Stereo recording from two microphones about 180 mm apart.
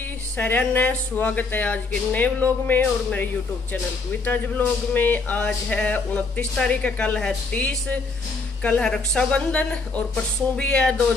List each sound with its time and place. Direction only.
0.4 s a woman's voice: 10° left (ahead or behind)